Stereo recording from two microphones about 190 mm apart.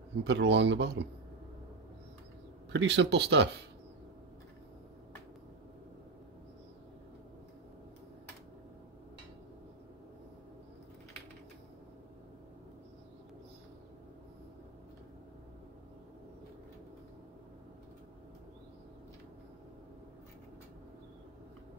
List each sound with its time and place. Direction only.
0.2 s speech: 65° right (ahead or behind)
2.7 s speech: 70° right (ahead or behind)